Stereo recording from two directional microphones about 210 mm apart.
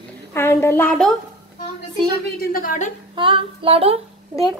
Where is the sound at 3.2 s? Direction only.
25° right (ahead or behind).